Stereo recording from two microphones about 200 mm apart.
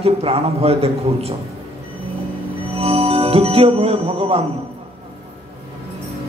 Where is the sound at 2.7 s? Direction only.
30° right (ahead or behind).